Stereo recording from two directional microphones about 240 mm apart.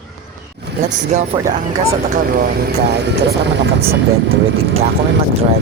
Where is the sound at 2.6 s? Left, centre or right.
Right.